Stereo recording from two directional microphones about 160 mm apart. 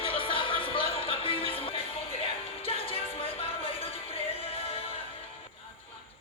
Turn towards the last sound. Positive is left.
turn(degrees=35)  # may be behind; listen again after turning